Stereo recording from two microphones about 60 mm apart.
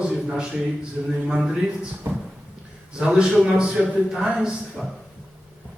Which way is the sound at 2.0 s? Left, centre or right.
Right.